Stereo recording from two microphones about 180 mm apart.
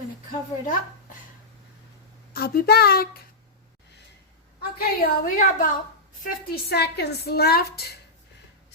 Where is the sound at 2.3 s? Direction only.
60° left (ahead or behind).